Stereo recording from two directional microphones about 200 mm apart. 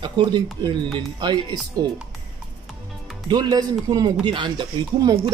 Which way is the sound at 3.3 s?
20° right (ahead or behind).